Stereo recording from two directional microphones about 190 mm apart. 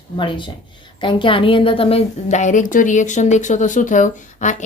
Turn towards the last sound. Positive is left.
turn(degrees=40)  # may be behind; listen again after turning